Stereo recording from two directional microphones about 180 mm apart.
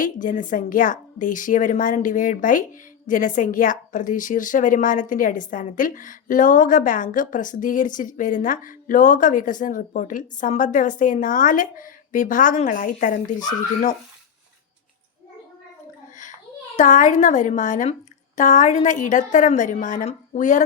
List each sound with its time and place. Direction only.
0.0 s a woman's voice: 45° left (ahead or behind)
16.7 s a woman's voice: 45° left (ahead or behind)